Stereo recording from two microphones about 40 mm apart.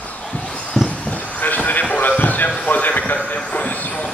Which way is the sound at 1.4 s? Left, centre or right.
Left.